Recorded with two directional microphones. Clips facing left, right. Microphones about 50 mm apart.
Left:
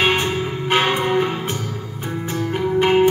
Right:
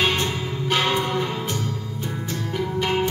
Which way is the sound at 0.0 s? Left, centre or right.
Left.